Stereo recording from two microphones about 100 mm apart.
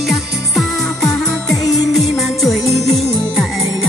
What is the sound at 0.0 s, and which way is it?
Music, centre (ahead or behind).